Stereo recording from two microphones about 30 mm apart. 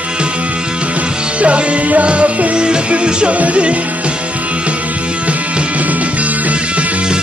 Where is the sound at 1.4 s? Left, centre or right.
Right.